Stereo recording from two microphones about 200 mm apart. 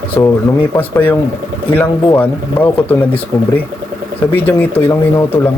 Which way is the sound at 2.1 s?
10° left (ahead or behind).